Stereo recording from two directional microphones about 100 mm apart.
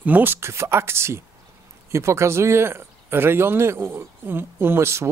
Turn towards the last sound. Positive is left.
turn(degrees=-25)  # may be behind; listen again after turning